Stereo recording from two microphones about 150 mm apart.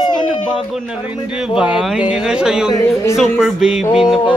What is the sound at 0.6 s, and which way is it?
A man's voice, 5° right (ahead or behind).